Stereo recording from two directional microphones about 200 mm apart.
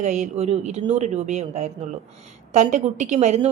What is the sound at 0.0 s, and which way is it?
A woman's voice, 35° right (ahead or behind).